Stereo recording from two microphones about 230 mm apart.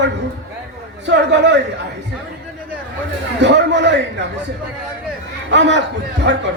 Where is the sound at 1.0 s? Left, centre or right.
Right.